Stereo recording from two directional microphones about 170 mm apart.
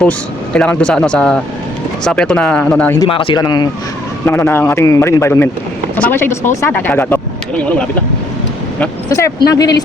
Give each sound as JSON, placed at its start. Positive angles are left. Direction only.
{"t": 0.0, "sound": "a man's voice", "side_deg": 5}
{"t": 3.0, "sound": "speech", "side_deg": 30}
{"t": 4.3, "sound": "a man's voice", "side_deg": 15}
{"t": 9.0, "sound": "speech", "side_deg": 15}